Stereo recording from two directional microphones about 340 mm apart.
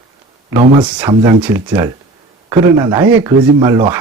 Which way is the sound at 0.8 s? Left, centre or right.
Centre.